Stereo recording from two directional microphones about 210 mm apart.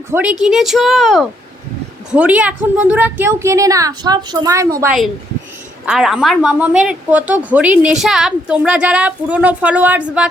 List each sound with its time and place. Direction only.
0.1 s a woman's voice: 5° right (ahead or behind)
4.8 s a woman's voice: 5° right (ahead or behind)